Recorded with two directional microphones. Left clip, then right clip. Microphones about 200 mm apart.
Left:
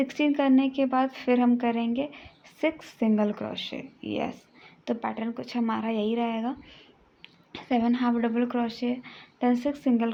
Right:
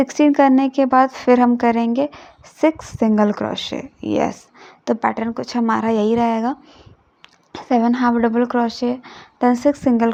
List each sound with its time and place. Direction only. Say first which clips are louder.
0.0 s speech: right 11 dB; 35° right (ahead or behind)